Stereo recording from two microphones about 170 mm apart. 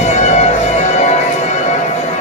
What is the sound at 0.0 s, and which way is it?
Music, 40° left (ahead or behind).